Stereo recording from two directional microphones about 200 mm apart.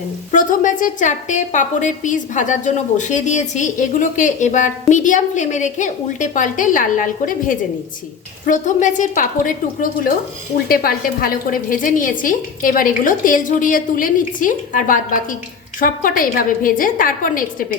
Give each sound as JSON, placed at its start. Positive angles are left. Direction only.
{"t": 0.3, "sound": "a woman's voice", "side_deg": 40}